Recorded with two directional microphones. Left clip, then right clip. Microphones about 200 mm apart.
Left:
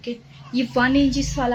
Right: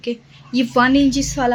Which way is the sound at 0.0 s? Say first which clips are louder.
Right 6 dB; 45° right (ahead or behind).